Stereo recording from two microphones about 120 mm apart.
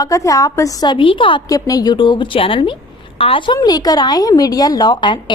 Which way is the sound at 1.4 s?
30° left (ahead or behind).